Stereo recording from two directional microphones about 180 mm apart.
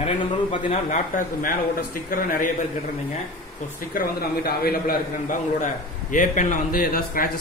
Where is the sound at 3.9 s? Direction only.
55° left (ahead or behind).